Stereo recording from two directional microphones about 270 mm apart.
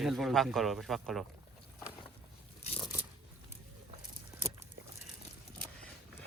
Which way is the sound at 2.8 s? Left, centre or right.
Centre.